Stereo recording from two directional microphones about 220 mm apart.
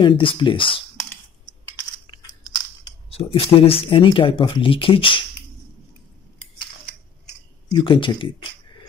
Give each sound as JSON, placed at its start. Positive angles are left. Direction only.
{"t": 0.0, "sound": "speech", "side_deg": 20}
{"t": 2.1, "sound": "crunch", "side_deg": 25}
{"t": 2.8, "sound": "speech", "side_deg": 25}
{"t": 7.7, "sound": "speech", "side_deg": 20}